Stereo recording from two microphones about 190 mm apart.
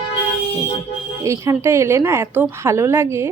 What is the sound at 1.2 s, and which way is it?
Speech, 15° right (ahead or behind).